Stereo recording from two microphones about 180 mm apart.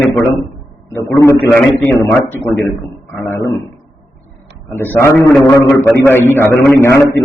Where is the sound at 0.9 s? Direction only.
20° left (ahead or behind).